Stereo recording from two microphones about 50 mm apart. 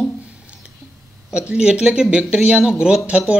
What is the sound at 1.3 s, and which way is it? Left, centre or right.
Speech, centre.